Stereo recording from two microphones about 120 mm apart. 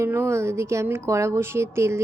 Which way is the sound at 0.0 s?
20° right (ahead or behind).